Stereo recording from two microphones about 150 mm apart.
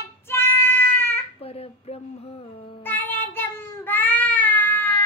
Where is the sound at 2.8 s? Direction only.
10° left (ahead or behind).